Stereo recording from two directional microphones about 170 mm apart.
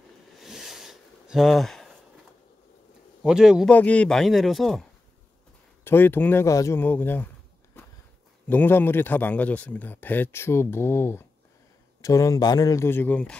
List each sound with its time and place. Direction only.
0.3 s a sound: centre (ahead or behind)
3.3 s speech: 5° right (ahead or behind)
3.7 s speech: 10° left (ahead or behind)
5.9 s a man's voice: 10° left (ahead or behind)
8.5 s a man's voice: 10° left (ahead or behind)